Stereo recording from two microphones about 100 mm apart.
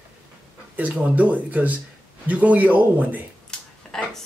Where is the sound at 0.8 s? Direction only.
15° right (ahead or behind).